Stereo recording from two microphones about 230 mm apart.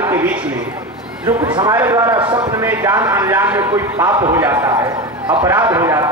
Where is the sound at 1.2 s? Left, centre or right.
Centre.